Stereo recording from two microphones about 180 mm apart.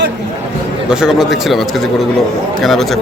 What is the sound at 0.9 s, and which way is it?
Speech, 5° right (ahead or behind).